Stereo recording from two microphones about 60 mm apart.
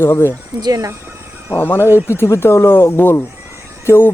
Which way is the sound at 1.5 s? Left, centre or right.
Left.